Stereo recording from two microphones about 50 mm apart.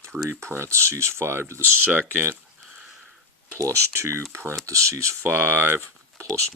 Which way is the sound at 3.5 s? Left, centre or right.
Right.